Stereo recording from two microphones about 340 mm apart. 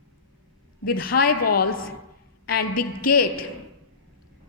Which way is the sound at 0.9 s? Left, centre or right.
Left.